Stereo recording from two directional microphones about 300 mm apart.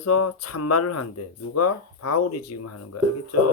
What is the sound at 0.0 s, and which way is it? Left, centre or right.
Speech, left.